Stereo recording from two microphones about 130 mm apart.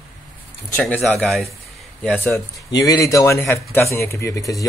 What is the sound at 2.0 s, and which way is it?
Speech, 15° left (ahead or behind).